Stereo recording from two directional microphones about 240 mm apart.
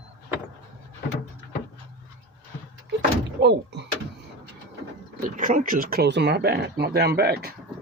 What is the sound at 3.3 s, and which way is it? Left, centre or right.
Door, right.